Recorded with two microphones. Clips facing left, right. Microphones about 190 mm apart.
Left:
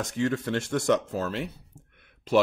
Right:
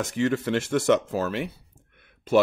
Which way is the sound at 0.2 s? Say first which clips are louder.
Right 3 dB; 80° right.